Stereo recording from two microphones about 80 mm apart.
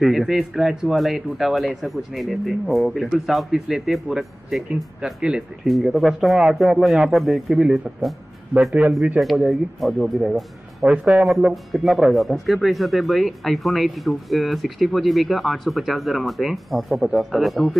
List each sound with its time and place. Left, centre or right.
0.0 s speech: centre
5.7 s speech: centre
9.2 s speech: centre
11.5 s speech: centre